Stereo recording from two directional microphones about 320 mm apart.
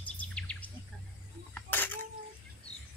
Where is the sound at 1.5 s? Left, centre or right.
Centre.